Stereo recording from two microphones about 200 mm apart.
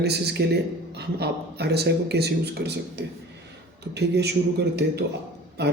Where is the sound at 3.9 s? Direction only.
55° right (ahead or behind).